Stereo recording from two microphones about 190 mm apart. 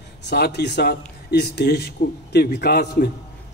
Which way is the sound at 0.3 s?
60° left (ahead or behind).